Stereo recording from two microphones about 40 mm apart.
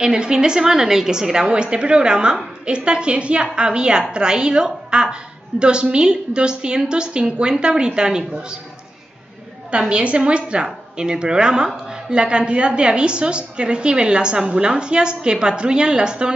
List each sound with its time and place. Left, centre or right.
0.0 s a woman's voice: centre
9.7 s a woman's voice: right